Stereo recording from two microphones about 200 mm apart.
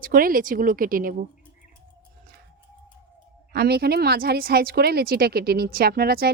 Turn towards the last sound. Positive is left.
turn(degrees=-50)  # may be behind; listen again after turning